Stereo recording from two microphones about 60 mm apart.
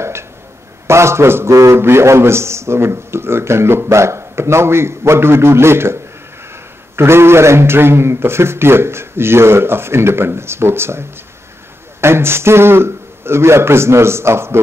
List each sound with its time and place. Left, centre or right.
0.8 s speech: right
1.5 s a man's voice: right
1.8 s speech: right
7.0 s speech: right